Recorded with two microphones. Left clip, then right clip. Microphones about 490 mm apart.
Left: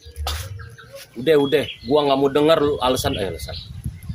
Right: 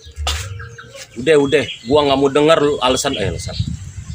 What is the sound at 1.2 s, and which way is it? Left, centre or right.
Speech, left.